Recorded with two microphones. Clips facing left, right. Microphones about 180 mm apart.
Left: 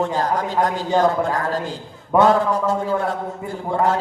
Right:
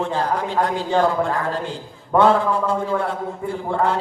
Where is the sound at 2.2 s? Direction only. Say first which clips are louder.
Even; 40° left (ahead or behind).